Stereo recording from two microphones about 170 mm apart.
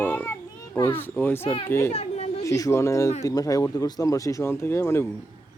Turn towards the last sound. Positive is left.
turn(degrees=15)  # may be behind; listen again after turning